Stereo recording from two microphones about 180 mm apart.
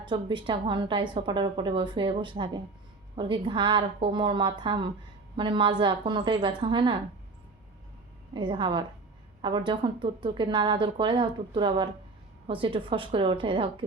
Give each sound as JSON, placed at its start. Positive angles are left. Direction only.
{"t": 0.0, "sound": "speech", "side_deg": -25}
{"t": 8.3, "sound": "speech", "side_deg": -25}